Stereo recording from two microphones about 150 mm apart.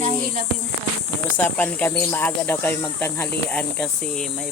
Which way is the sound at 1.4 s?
10° left (ahead or behind).